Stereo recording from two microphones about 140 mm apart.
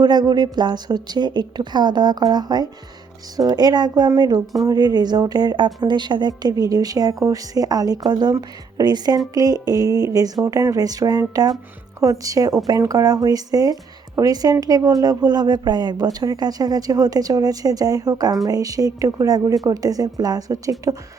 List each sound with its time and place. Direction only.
0.0 s speech: 30° right (ahead or behind)